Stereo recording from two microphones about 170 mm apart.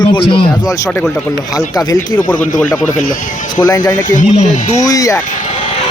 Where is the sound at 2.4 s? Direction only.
50° left (ahead or behind).